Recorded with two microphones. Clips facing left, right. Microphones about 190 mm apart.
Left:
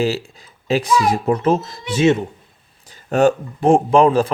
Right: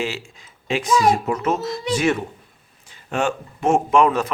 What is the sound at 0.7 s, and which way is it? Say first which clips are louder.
Speech: left 1 dB; 35° left (ahead or behind).